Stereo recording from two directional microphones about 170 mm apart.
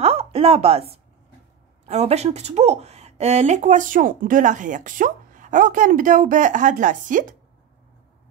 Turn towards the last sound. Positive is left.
turn(degrees=-50)  # may be behind; listen again after turning